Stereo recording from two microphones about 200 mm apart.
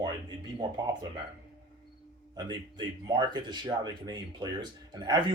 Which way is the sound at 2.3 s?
20° right (ahead or behind).